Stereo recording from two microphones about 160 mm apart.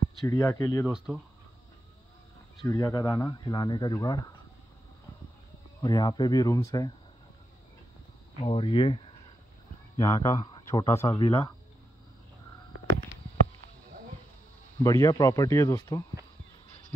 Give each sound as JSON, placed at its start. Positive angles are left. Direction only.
{"t": 0.3, "sound": "speech", "side_deg": 20}
{"t": 0.8, "sound": "speech", "side_deg": -5}
{"t": 2.6, "sound": "speech", "side_deg": 20}
{"t": 5.8, "sound": "speech", "side_deg": 25}
{"t": 8.4, "sound": "speech", "side_deg": 35}
{"t": 9.9, "sound": "speech", "side_deg": 20}
{"t": 14.8, "sound": "speech", "side_deg": 20}